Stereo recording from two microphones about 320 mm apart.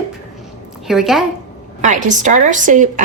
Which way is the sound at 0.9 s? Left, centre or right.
Centre.